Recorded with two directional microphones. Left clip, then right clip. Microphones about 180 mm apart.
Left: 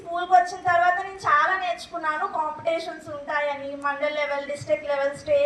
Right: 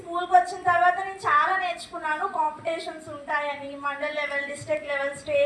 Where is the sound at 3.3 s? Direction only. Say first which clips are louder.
Left 2 dB; 25° left (ahead or behind).